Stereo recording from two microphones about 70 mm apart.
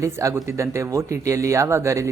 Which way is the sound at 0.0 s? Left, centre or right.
Right.